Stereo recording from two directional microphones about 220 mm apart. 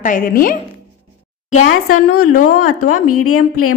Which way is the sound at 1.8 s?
85° left.